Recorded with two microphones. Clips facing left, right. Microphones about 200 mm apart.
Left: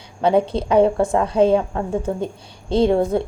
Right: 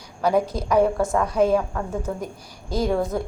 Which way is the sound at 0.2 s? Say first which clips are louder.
Left 4 dB; 25° left (ahead or behind).